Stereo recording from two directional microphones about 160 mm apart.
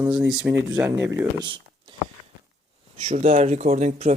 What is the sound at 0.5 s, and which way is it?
Speech, 10° right (ahead or behind).